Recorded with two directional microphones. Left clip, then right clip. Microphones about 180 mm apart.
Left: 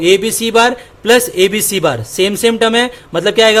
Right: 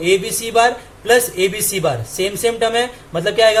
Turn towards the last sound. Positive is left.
turn(degrees=55)  # may be behind; listen again after turning